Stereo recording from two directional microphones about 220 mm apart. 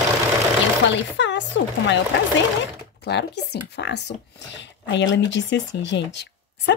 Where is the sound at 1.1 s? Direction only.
55° left (ahead or behind).